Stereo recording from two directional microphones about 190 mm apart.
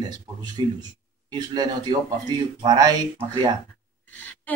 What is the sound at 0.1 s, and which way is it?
Speech, 20° right (ahead or behind).